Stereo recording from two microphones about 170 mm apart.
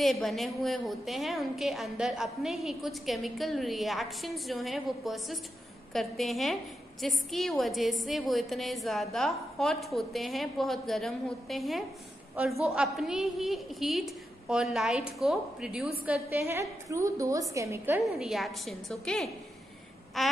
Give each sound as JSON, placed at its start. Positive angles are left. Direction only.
{"t": 0.0, "sound": "a woman's voice", "side_deg": 0}
{"t": 18.1, "sound": "a woman's voice", "side_deg": 0}